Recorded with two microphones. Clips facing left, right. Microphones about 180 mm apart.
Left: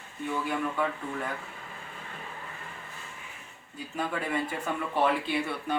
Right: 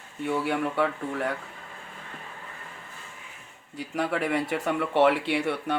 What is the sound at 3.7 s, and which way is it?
Speech, 90° right.